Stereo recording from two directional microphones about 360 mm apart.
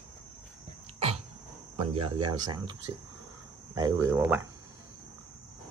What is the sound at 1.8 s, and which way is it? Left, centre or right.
Speech, centre.